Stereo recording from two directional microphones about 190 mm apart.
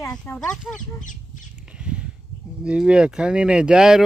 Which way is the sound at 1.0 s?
40° left (ahead or behind).